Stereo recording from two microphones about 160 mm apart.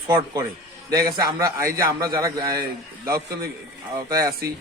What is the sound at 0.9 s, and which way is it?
A man's voice, 20° right (ahead or behind).